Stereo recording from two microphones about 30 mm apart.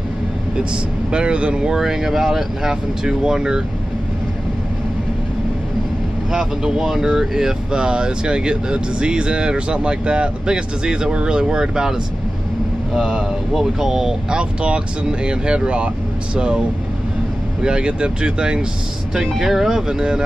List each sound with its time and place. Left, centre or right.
1.1 s speech: right
1.8 s speech: centre
6.3 s speech: centre
7.9 s speech: right
13.1 s speech: centre
14.3 s speech: right
17.6 s speech: right
19.3 s speech: centre
19.9 s speech: right